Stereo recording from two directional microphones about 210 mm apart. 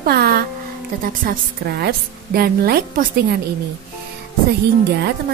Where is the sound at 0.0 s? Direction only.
45° right (ahead or behind).